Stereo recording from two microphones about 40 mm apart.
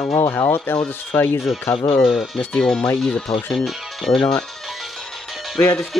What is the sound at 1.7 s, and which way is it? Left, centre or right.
Speech, left.